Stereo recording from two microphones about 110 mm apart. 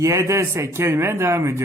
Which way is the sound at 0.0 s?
25° right (ahead or behind).